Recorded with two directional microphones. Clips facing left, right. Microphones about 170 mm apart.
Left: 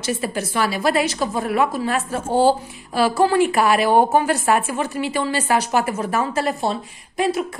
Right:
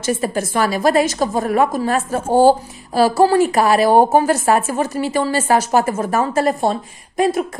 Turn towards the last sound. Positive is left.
turn(degrees=-45)  # may be behind; listen again after turning